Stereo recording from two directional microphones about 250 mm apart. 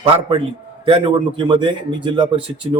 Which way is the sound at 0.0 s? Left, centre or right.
Right.